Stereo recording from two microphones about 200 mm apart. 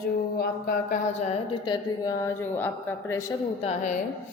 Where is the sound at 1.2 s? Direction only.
25° left (ahead or behind).